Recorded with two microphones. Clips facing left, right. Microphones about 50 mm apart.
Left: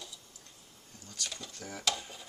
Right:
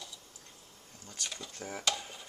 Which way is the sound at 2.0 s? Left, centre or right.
Centre.